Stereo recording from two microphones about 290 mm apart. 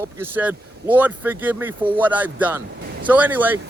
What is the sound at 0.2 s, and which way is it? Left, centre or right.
Speech, centre.